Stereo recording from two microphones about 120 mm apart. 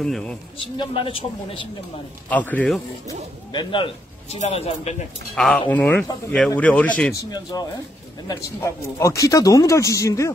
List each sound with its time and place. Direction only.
0.0 s speech: 5° left (ahead or behind)
0.7 s speech: 50° left (ahead or behind)
2.2 s speech: 15° left (ahead or behind)
3.5 s speech: 45° left (ahead or behind)
4.4 s speech: 65° left (ahead or behind)
5.3 s speech: 5° left (ahead or behind)
7.2 s speech: 35° left (ahead or behind)